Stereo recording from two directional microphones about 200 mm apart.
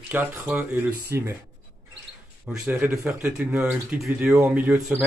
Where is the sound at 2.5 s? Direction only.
5° right (ahead or behind).